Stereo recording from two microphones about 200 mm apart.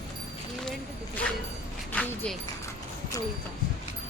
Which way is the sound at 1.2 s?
5° left (ahead or behind).